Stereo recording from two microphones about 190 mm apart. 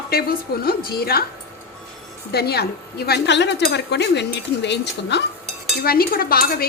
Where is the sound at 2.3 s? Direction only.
55° left (ahead or behind).